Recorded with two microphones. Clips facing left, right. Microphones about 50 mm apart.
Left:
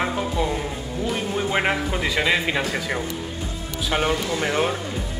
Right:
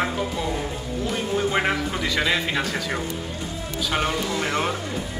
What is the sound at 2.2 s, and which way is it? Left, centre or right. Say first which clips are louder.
Speech: left 2 dB; centre.